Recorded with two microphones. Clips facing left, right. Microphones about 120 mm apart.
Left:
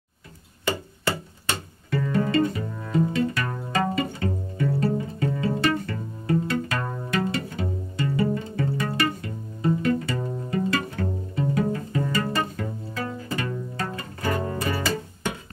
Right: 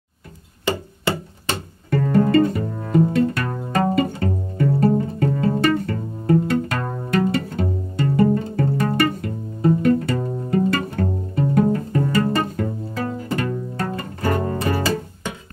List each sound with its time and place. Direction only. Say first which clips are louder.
1.9 s pizzicato: right 7 dB; 50° right (ahead or behind)